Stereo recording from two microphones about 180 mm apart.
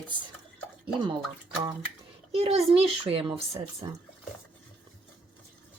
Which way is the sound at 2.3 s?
35° right (ahead or behind).